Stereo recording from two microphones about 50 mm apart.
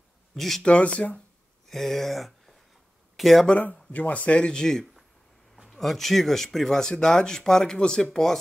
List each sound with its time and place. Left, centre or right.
0.3 s speech: centre
0.6 s speech: left
1.7 s speech: centre
3.4 s speech: left; by 8.4 s centre